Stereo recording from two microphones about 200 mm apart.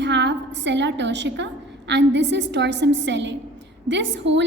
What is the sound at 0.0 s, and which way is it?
A woman's voice, 60° right (ahead or behind).